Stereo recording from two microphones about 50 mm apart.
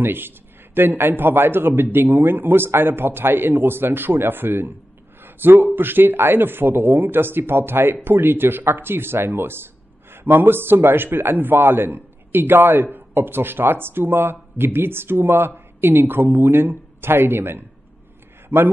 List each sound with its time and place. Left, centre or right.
0.0 s a man's voice: right